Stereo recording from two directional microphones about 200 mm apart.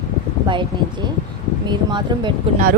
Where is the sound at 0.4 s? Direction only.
25° right (ahead or behind).